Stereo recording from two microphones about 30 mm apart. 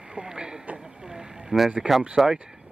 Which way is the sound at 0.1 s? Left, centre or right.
Right.